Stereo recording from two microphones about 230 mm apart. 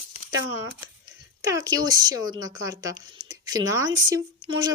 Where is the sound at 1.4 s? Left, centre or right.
Centre.